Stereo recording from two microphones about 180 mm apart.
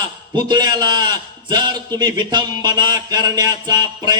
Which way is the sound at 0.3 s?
25° right (ahead or behind).